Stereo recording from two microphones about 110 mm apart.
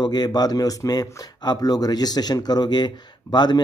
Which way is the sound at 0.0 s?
40° left (ahead or behind).